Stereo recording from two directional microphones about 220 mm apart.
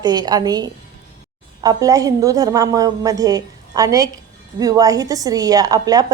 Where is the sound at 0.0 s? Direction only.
20° right (ahead or behind).